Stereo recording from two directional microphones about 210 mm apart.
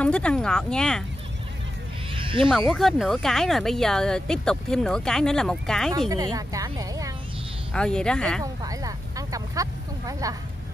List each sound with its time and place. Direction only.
0.0 s speech: 5° left (ahead or behind)
2.1 s a sound: 25° right (ahead or behind)
2.4 s speech: centre (ahead or behind)
6.0 s speech: 15° right (ahead or behind)
7.7 s speech: 5° left (ahead or behind)
8.6 s a sound: 15° right (ahead or behind)